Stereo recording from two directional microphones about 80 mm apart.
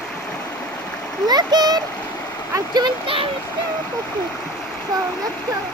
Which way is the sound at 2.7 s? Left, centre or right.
Right.